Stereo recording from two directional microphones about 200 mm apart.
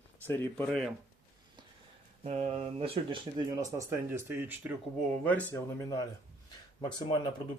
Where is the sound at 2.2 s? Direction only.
30° right (ahead or behind); by 4.7 s 10° right (ahead or behind).